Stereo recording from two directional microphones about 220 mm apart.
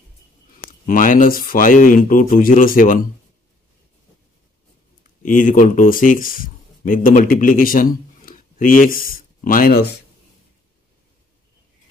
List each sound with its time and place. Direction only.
0.6 s speech: 40° left (ahead or behind)
5.2 s speech: 35° left (ahead or behind)